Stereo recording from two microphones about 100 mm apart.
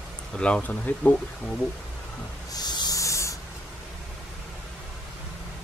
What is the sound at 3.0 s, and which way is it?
Rub, 30° left (ahead or behind).